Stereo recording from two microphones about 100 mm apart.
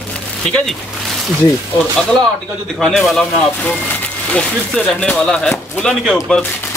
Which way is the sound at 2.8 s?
Centre (ahead or behind).